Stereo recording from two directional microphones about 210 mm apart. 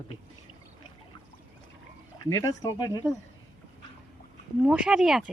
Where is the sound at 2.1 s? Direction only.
15° left (ahead or behind).